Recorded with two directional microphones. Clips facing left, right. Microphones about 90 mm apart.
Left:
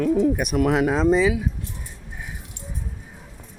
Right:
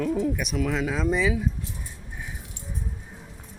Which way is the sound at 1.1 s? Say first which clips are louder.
Left 5 dB; 20° left (ahead or behind).